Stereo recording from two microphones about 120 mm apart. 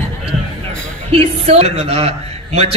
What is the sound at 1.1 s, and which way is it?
A man's voice, 60° right (ahead or behind).